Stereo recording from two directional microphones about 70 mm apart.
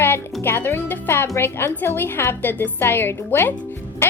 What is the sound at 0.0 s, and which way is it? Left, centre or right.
A child's voice, left.